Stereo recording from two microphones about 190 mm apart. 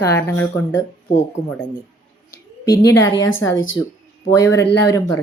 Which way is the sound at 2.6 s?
15° left (ahead or behind).